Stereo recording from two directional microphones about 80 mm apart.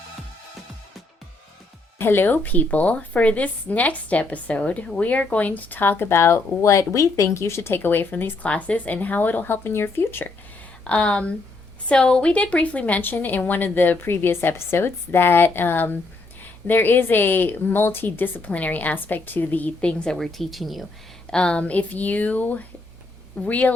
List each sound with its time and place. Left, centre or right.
2.0 s a woman's voice: left
10.8 s a woman's voice: centre
21.2 s a woman's voice: centre